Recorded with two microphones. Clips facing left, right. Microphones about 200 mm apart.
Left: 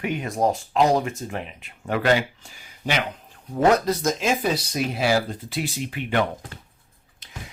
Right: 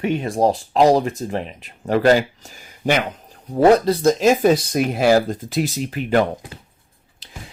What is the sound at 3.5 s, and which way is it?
Speech, 35° right (ahead or behind).